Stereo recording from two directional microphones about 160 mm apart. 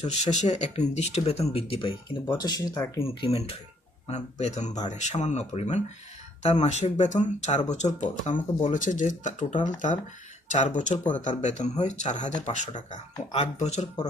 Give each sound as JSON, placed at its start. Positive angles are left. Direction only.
{"t": 0.0, "sound": "speech", "side_deg": 45}
{"t": 3.1, "sound": "speech", "side_deg": 40}